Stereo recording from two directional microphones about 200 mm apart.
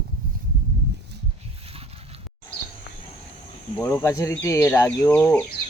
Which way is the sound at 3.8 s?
15° left (ahead or behind).